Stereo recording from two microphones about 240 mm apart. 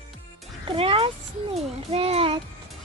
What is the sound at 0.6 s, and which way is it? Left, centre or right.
A child's voice, right.